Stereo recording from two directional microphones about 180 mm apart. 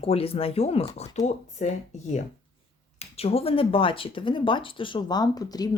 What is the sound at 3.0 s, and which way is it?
Speech, 35° left (ahead or behind).